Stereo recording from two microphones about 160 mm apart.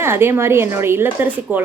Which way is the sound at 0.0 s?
15° right (ahead or behind).